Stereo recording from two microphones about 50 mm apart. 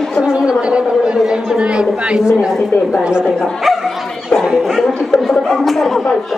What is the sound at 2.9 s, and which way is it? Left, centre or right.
Speech, centre.